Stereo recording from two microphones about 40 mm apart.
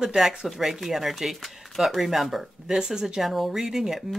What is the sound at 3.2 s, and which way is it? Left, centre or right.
Speech, centre.